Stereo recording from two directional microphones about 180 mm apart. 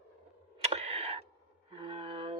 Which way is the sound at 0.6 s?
35° right (ahead or behind).